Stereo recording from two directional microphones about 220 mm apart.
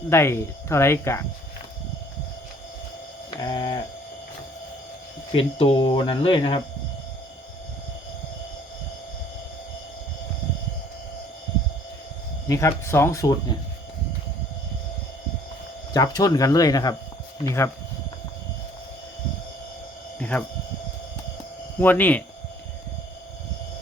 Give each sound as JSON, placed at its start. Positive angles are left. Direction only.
{"t": 0.1, "sound": "speech", "side_deg": 10}
{"t": 3.2, "sound": "a sound", "side_deg": 20}
{"t": 5.3, "sound": "speech", "side_deg": 25}
{"t": 12.5, "sound": "speech", "side_deg": 15}
{"t": 15.9, "sound": "speech", "side_deg": 15}
{"t": 20.1, "sound": "a sound", "side_deg": 5}
{"t": 21.8, "sound": "speech", "side_deg": 10}